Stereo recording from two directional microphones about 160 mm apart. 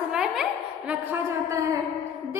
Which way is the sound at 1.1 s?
20° right (ahead or behind).